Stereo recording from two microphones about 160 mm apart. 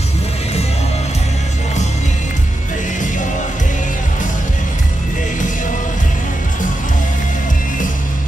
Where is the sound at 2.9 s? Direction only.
50° left (ahead or behind).